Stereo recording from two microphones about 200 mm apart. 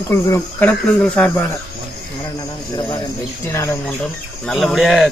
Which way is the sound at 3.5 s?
15° left (ahead or behind).